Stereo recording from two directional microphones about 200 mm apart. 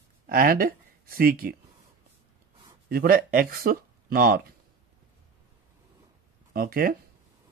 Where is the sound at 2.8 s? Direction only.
50° right (ahead or behind).